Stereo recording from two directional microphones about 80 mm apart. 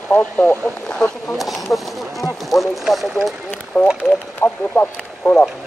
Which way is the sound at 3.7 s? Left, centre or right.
Centre.